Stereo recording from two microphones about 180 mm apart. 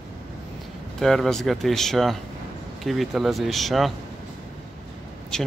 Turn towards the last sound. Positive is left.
turn(degrees=5)  # may be behind; listen again after turning